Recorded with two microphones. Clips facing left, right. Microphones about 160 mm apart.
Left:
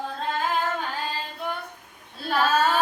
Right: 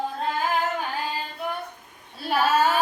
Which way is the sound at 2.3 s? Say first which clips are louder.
Right 1 dB; 5° right (ahead or behind).